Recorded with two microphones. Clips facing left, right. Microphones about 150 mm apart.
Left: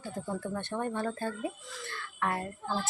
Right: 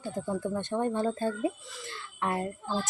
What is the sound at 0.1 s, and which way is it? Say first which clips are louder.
Speech: right 4 dB; 15° right (ahead or behind).